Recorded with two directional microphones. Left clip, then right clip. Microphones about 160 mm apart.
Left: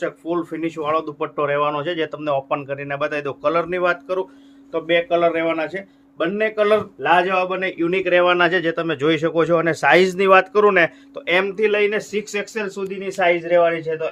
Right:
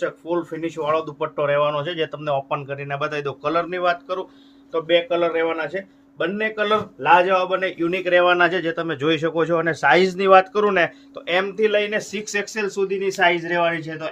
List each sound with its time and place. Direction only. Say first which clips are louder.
0.0 s a man's voice: even; 35° left (ahead or behind); by 4.3 s 80° left
4.7 s a man's voice: left 1 dB; 70° left (ahead or behind); by 14.1 s 20° left (ahead or behind)